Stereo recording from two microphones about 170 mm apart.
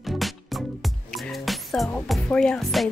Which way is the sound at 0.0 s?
Centre (ahead or behind).